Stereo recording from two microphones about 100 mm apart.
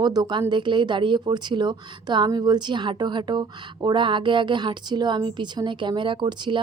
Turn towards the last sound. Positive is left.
turn(degrees=-50)  # may be behind; listen again after turning